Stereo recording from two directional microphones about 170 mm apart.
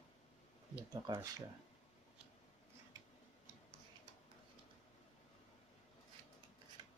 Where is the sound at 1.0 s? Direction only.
20° right (ahead or behind).